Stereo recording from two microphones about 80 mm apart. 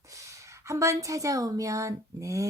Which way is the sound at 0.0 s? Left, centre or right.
Right.